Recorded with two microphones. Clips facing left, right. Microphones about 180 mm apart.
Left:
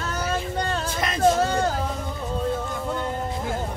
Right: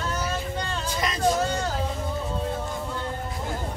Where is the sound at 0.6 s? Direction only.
50° left (ahead or behind).